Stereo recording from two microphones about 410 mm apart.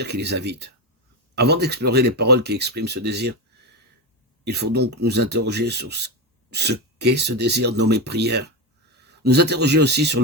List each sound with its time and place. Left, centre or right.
0.0 s speech: right
4.4 s speech: right